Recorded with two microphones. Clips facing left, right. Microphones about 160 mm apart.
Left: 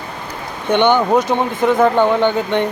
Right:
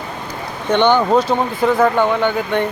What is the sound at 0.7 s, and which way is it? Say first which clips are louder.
Speech: even; 15° left (ahead or behind).